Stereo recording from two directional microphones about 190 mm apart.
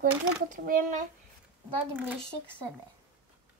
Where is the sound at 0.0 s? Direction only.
45° right (ahead or behind).